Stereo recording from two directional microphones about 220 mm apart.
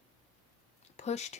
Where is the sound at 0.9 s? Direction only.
30° left (ahead or behind).